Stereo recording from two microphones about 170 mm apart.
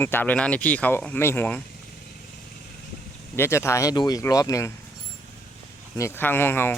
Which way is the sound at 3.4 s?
15° left (ahead or behind).